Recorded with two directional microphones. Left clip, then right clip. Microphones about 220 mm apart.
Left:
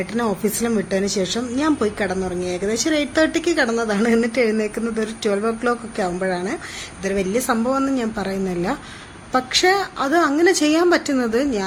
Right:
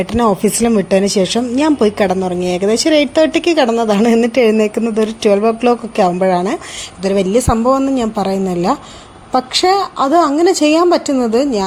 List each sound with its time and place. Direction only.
0.0 s a woman's voice: 25° right (ahead or behind)